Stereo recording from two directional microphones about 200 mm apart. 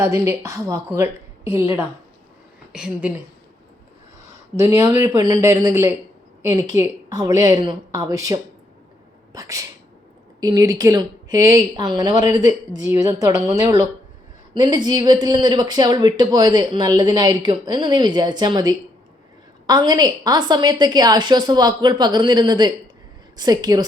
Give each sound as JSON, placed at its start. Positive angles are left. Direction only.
{"t": 0.0, "sound": "speech", "side_deg": -15}
{"t": 2.7, "sound": "a woman's voice", "side_deg": -5}
{"t": 4.5, "sound": "speech", "side_deg": -15}